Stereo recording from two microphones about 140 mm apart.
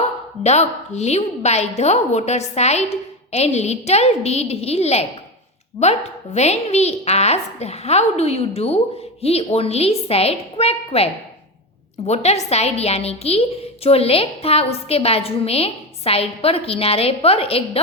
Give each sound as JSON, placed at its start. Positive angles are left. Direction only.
{"t": 0.4, "sound": "a woman's voice", "side_deg": 50}